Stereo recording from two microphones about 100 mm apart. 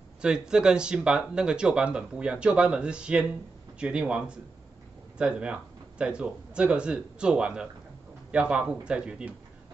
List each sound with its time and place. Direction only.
0.2 s speech: 5° right (ahead or behind)